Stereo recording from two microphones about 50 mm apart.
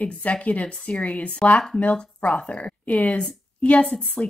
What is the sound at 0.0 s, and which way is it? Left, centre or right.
A woman's voice, left.